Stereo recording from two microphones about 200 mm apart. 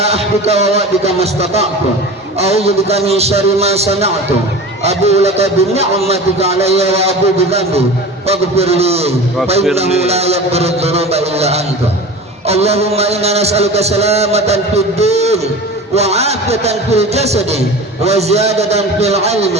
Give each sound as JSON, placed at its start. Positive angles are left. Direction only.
{"t": 0.0, "sound": "a man's voice", "side_deg": -30}